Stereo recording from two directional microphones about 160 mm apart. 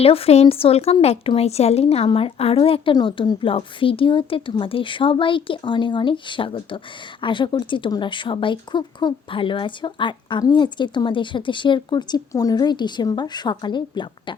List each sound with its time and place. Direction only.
0.0 s speech: 35° left (ahead or behind)